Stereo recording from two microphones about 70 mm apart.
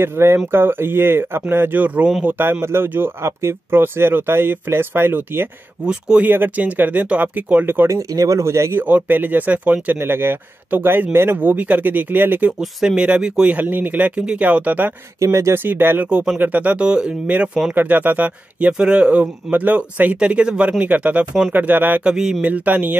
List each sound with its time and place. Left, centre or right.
0.0 s speech: right
5.9 s speech: centre
6.2 s speech: right
7.9 s speech: right
8.8 s speech: right
12.4 s speech: centre
13.7 s speech: right
15.1 s speech: right
15.5 s speech: right
16.1 s speech: centre
17.7 s speech: right
22.0 s speech: centre
22.4 s speech: right